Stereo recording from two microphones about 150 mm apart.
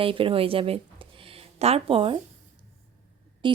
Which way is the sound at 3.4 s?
30° right (ahead or behind).